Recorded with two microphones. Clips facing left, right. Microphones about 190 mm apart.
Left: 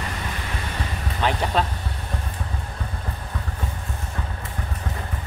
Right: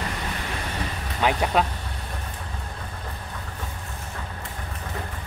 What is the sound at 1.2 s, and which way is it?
Speech, 10° right (ahead or behind).